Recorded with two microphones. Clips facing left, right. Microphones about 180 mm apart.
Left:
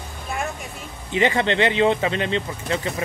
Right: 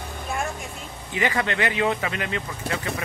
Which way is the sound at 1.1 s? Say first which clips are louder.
Left 5 dB; 25° left (ahead or behind).